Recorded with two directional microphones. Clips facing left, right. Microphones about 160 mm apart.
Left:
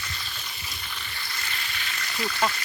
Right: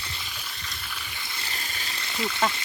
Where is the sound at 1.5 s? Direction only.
40° right (ahead or behind); by 2.4 s 20° right (ahead or behind).